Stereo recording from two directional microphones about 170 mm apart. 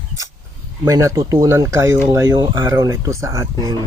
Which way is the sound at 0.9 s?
20° right (ahead or behind).